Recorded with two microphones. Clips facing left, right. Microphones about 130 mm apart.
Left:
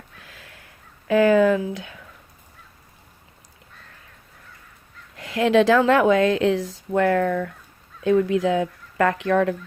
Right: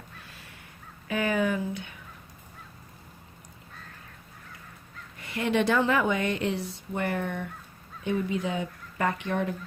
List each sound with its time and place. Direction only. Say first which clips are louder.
0.2 s a sound: left 2 dB; 90° left
1.0 s speech: left 11 dB; 90° left
5.1 s speech: left 9 dB; 90° left